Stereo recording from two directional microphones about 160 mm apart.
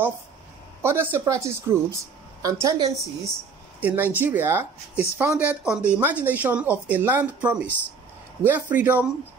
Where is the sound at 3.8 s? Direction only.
10° right (ahead or behind).